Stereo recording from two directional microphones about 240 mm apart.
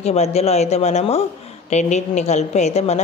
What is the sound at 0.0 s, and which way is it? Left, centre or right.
A woman's voice, left.